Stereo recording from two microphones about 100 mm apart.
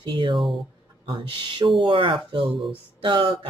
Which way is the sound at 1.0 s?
50° right (ahead or behind).